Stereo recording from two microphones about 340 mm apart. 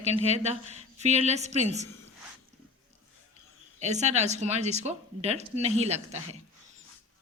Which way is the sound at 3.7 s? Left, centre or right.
Centre.